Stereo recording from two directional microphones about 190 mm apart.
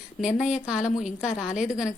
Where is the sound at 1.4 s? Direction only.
40° left (ahead or behind).